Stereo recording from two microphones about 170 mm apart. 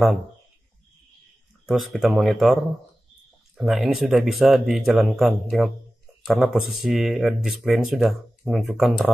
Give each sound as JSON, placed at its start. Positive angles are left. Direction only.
{"t": 1.7, "sound": "speech", "side_deg": 0}